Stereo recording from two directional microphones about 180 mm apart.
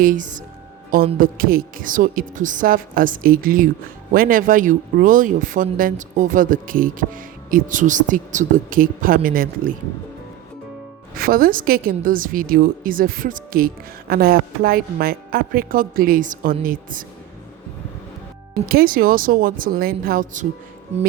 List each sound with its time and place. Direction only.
0.0 s speech: 45° right (ahead or behind)
11.2 s speech: 55° right (ahead or behind)
18.6 s speech: 55° right (ahead or behind)